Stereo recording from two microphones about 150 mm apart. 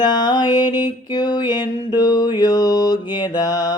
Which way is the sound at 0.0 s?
30° left (ahead or behind).